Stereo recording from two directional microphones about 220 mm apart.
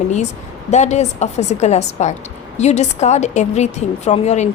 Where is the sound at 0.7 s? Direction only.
30° left (ahead or behind).